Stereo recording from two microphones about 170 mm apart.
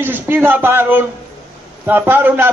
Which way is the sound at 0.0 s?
15° right (ahead or behind).